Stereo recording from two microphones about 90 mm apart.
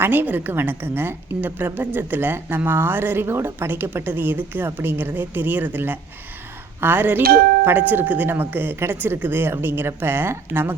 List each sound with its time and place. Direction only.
0.0 s a woman's voice: 20° right (ahead or behind)